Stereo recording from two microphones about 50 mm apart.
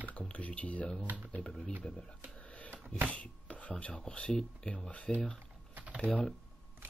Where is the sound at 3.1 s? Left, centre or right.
Left.